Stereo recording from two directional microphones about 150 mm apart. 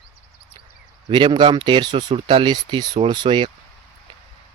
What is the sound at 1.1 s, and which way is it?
Speech, 30° right (ahead or behind).